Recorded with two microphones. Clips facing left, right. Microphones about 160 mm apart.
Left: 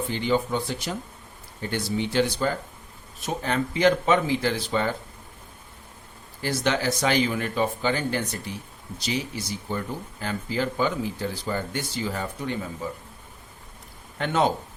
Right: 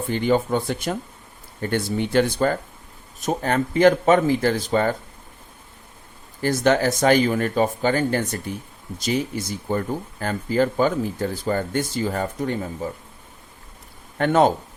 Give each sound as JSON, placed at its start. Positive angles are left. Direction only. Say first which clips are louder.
{"t": 0.1, "sound": "speech", "louder": "right 6 dB", "side_deg": -50}
{"t": 6.4, "sound": "speech", "louder": "right 6 dB", "side_deg": -50}
{"t": 14.2, "sound": "speech", "louder": "right 6 dB", "side_deg": -50}